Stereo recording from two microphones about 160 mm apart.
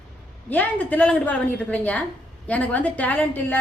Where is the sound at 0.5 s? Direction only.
10° left (ahead or behind).